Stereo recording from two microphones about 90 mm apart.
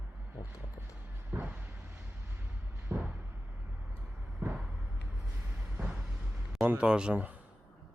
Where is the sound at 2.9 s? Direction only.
10° right (ahead or behind).